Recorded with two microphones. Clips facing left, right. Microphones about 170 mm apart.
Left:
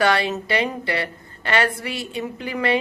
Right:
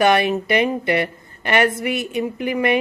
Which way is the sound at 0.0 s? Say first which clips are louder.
Right 4 dB; 20° right (ahead or behind).